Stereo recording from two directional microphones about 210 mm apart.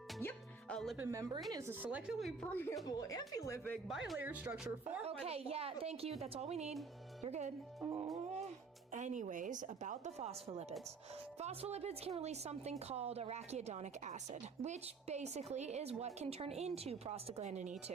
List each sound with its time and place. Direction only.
0.2 s music: 5° left (ahead or behind)
0.9 s a woman's voice: 15° right (ahead or behind)
5.0 s a woman's voice: 30° right (ahead or behind)
7.9 s a woman's voice: 15° right (ahead or behind)
8.9 s a woman's voice: 35° right (ahead or behind)